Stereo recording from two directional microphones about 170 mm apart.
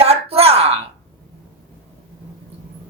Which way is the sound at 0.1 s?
35° right (ahead or behind).